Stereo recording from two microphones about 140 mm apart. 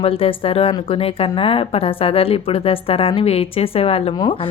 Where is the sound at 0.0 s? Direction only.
40° left (ahead or behind).